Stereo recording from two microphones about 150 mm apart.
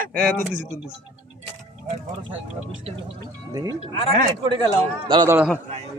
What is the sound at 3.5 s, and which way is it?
Speech, 25° right (ahead or behind).